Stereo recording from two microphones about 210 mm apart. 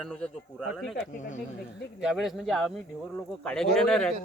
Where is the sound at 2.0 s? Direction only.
Centre (ahead or behind).